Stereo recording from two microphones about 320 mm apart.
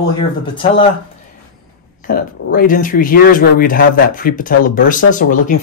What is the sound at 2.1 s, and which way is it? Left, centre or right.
Speech, left.